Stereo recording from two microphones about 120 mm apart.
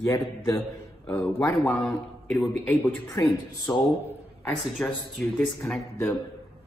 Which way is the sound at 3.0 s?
35° left (ahead or behind).